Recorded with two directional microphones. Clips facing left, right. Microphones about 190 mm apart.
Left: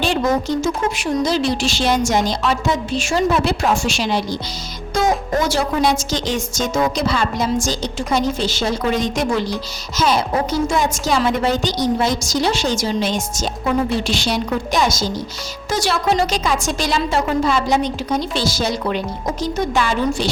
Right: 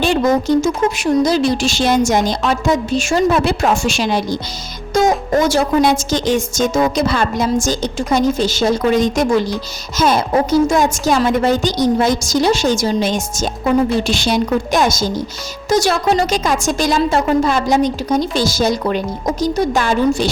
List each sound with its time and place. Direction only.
0.0 s a woman's voice: 45° right (ahead or behind)